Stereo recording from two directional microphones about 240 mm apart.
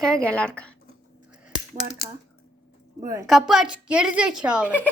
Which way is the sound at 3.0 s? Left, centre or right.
Centre.